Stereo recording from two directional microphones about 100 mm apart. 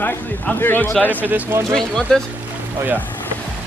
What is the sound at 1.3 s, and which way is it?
Speech, 20° right (ahead or behind).